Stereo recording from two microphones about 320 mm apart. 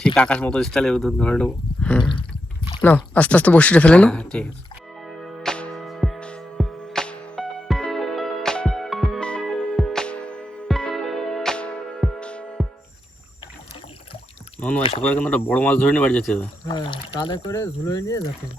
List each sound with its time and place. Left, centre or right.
0.0 s speech: centre
5.0 s music: centre
14.6 s speech: centre
16.6 s speech: centre